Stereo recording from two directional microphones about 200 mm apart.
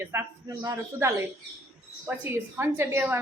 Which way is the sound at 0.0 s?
15° right (ahead or behind).